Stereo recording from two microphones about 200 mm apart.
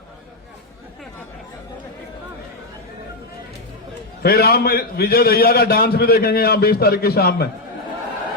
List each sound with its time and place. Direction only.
4.2 s a man's voice: 50° left (ahead or behind)